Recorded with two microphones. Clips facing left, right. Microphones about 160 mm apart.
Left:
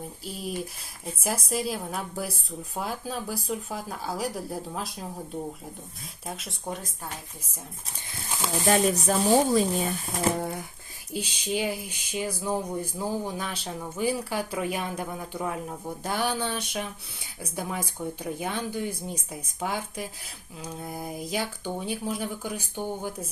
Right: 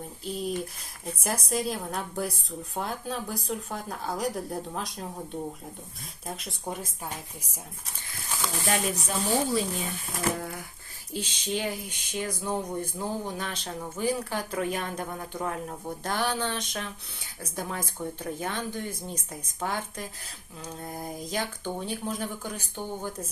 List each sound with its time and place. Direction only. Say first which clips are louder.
0.3 s speech: right 3 dB; 5° left (ahead or behind)
8.7 s speech: left 7 dB; 40° left (ahead or behind)
10.2 s speech: left 3 dB; 25° left (ahead or behind)
11.1 s speech: left 2 dB; 10° left (ahead or behind)